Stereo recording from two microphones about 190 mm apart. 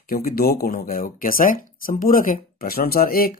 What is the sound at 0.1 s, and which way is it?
Speech, 50° left (ahead or behind).